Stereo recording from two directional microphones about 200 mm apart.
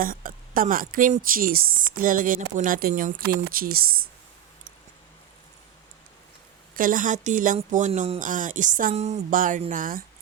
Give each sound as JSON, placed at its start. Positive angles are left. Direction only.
{"t": 0.0, "sound": "speech", "side_deg": -45}
{"t": 6.7, "sound": "speech", "side_deg": -45}